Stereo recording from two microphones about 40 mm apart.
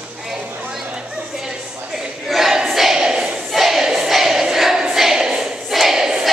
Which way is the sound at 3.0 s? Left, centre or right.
Centre.